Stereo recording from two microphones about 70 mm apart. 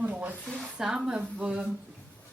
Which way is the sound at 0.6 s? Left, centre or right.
Centre.